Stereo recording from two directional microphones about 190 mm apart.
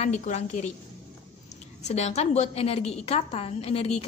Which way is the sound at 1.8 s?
35° left (ahead or behind).